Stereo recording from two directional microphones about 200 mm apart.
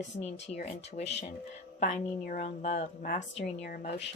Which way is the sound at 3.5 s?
55° left (ahead or behind).